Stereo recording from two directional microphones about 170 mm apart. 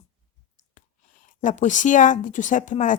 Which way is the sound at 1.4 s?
45° left (ahead or behind).